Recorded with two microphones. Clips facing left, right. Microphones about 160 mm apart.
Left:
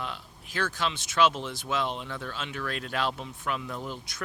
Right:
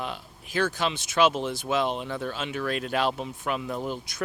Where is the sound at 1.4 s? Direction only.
45° right (ahead or behind).